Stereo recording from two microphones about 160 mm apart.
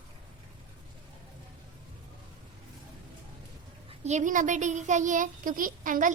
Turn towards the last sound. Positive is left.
turn(degrees=-55)  # may be behind; listen again after turning